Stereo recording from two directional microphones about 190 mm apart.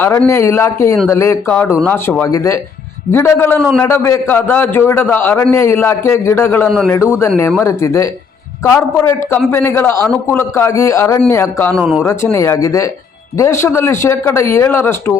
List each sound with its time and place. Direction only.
0.0 s a man's voice: 15° left (ahead or behind)
7.6 s a man's voice: 15° left (ahead or behind); by 12.0 s centre (ahead or behind)
12.0 s a man's voice: 15° left (ahead or behind)